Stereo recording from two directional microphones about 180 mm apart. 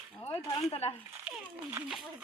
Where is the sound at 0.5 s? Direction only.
30° left (ahead or behind).